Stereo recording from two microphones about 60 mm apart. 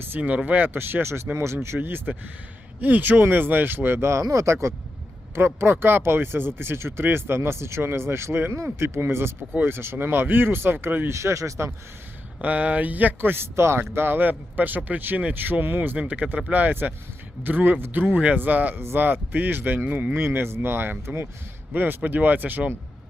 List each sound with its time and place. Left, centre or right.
0.2 s speech: right
11.1 s speech: right
12.4 s speech: right
16.0 s speech: right
18.0 s speech: right